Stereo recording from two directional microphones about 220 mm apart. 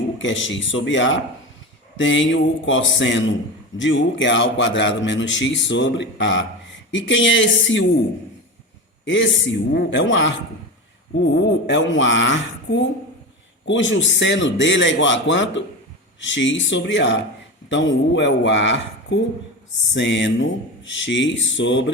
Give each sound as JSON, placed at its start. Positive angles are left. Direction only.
{"t": 0.2, "sound": "a man's voice", "side_deg": 60}
{"t": 9.0, "sound": "a man's voice", "side_deg": 55}